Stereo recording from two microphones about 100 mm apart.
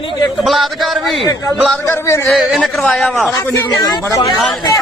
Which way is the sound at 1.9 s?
25° left (ahead or behind).